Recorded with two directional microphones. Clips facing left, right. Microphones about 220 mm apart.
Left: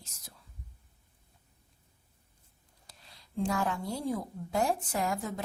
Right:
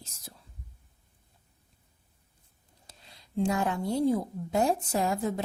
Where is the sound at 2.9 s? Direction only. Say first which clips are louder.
Right 2 dB; 25° right (ahead or behind).